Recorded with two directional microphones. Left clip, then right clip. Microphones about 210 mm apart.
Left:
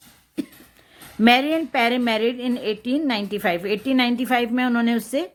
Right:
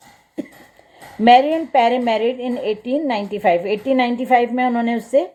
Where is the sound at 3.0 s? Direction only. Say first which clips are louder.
Right 6 dB; 35° left (ahead or behind).